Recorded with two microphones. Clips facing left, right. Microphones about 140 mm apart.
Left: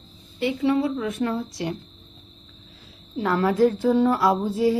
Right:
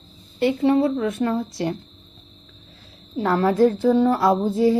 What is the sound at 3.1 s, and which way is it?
A woman's voice, 35° right (ahead or behind).